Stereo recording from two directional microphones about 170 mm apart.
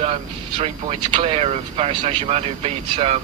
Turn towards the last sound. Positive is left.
turn(degrees=-35)  # may be behind; listen again after turning